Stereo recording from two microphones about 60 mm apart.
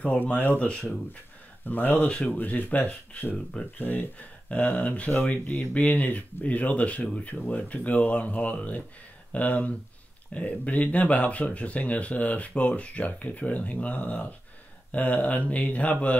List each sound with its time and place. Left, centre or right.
0.0 s speech: left
1.7 s speech: left
2.0 s speech: centre
2.3 s speech: left